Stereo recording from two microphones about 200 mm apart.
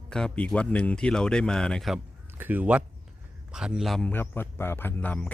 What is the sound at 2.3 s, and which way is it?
A man's voice, 10° right (ahead or behind).